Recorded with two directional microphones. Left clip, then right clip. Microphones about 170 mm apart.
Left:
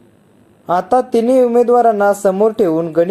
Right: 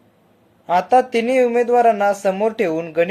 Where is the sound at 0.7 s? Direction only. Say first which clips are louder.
Left 1 dB; 20° left (ahead or behind).